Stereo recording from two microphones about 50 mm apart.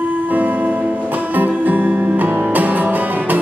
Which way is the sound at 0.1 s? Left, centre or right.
Right.